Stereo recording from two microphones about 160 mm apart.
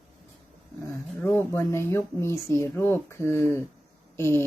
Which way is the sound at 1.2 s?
15° left (ahead or behind).